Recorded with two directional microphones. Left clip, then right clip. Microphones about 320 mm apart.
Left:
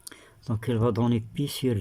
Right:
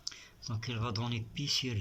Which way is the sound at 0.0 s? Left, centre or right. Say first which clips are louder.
Right 2 dB; left.